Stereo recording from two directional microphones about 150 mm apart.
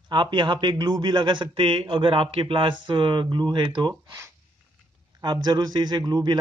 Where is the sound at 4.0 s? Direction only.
25° right (ahead or behind).